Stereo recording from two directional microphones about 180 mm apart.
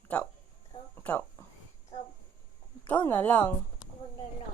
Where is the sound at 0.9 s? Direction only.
10° left (ahead or behind).